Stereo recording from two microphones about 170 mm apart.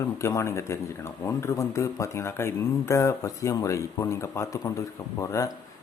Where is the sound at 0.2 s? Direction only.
15° left (ahead or behind).